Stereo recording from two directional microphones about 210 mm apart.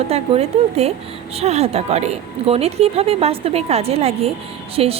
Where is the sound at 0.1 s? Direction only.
30° right (ahead or behind).